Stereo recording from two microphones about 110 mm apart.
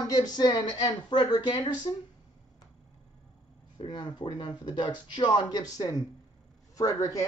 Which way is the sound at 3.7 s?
45° left (ahead or behind).